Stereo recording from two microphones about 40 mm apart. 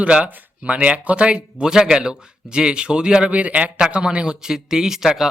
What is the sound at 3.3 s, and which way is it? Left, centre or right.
A man's voice, right.